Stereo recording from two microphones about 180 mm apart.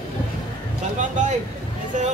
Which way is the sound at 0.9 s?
40° right (ahead or behind).